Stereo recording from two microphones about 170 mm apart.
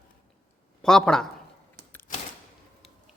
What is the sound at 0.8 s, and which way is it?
Speech, 5° left (ahead or behind).